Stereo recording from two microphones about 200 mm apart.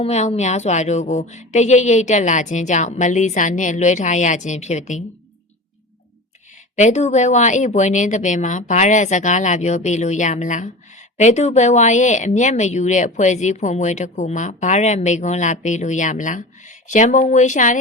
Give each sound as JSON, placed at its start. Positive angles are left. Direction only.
{"t": 0.0, "sound": "speech", "side_deg": 35}
{"t": 6.7, "sound": "speech", "side_deg": 35}